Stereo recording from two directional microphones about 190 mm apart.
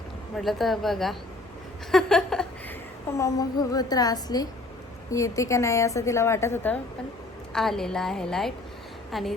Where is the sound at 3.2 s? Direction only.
20° left (ahead or behind); by 9.3 s centre (ahead or behind).